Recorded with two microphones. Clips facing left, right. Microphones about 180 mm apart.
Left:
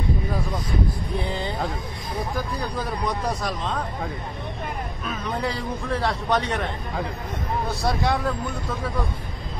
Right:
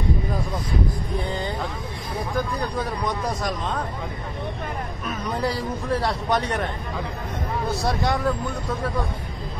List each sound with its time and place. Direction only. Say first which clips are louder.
5.0 s speech: right 2 dB; centre (ahead or behind)
7.6 s speech: right 1 dB; centre (ahead or behind)